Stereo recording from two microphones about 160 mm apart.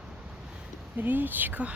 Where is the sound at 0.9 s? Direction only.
10° right (ahead or behind).